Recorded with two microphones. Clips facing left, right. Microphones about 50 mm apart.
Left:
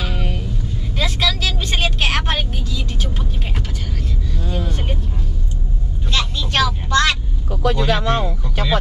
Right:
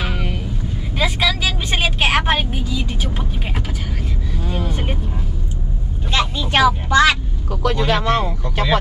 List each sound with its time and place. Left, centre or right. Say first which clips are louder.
0.0 s vehicle: right 1 dB; right
0.9 s vehicle: right 2 dB; centre
4.5 s vehicle: right 1 dB; centre
6.1 s vehicle: right 2 dB; centre
7.6 s speech: even; right